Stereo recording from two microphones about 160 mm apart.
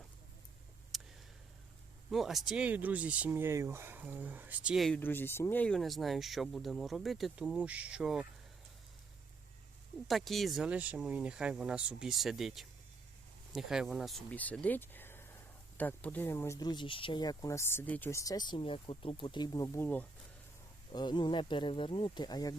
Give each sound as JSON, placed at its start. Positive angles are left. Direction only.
{"t": 0.9, "sound": "a sound", "side_deg": 0}
{"t": 2.0, "sound": "speech", "side_deg": 0}
{"t": 4.9, "sound": "speech", "side_deg": 15}
{"t": 10.1, "sound": "speech", "side_deg": 0}
{"t": 20.9, "sound": "speech", "side_deg": 30}